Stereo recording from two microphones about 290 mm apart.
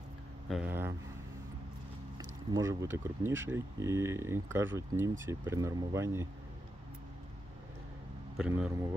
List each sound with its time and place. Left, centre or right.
0.5 s speech: centre
2.1 s speech: centre
8.4 s a man's voice: centre